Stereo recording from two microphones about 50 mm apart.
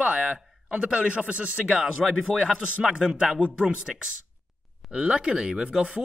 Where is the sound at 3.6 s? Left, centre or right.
Centre.